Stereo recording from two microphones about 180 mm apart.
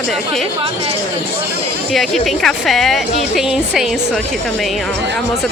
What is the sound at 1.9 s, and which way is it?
A woman's voice, centre (ahead or behind).